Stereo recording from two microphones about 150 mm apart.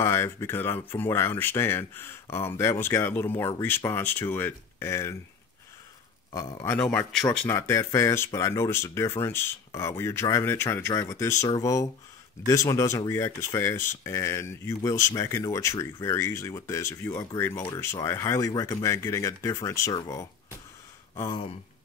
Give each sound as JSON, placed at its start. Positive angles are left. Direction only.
{"t": 0.0, "sound": "speech", "side_deg": 15}
{"t": 6.3, "sound": "speech", "side_deg": 15}
{"t": 7.2, "sound": "speech", "side_deg": 15}